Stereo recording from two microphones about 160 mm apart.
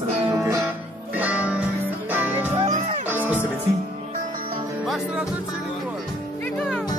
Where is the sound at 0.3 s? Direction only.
20° right (ahead or behind).